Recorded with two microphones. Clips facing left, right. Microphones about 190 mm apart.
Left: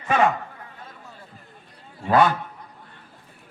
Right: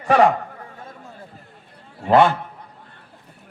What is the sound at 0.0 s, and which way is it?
Speech, 35° right (ahead or behind).